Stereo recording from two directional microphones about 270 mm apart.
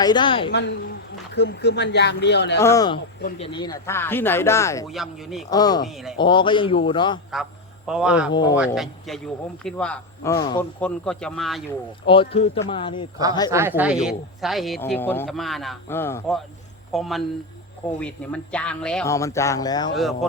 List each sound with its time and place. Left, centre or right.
0.0 s speech: centre
0.5 s speech: left
2.6 s speech: centre
4.9 s speech: centre
5.5 s speech: centre
5.9 s speech: centre
6.1 s speech: centre
7.9 s speech: centre
8.3 s speech: centre
8.5 s speech: centre
12.0 s speech: centre
13.5 s speech: centre